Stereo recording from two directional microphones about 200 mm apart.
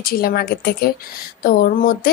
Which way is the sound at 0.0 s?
50° left (ahead or behind).